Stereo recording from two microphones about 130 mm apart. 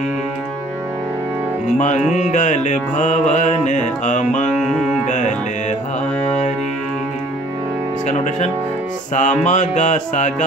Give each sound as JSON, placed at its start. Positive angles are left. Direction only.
{"t": 2.1, "sound": "music", "side_deg": 65}
{"t": 8.1, "sound": "speech", "side_deg": 65}
{"t": 9.1, "sound": "music", "side_deg": 65}